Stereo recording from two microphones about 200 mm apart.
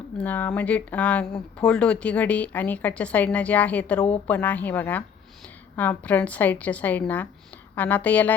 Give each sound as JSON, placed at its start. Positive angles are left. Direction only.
{"t": 0.2, "sound": "speech", "side_deg": 10}